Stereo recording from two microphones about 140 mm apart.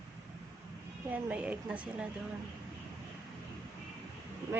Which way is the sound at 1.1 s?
10° right (ahead or behind).